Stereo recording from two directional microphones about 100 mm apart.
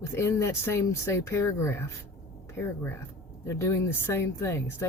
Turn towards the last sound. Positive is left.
turn(degrees=25)  # may be behind; listen again after turning